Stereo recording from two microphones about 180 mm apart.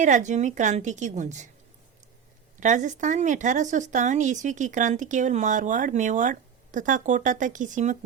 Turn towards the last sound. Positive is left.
turn(degrees=-45)  # may be behind; listen again after turning